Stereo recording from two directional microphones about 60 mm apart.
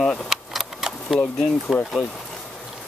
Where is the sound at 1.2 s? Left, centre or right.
Centre.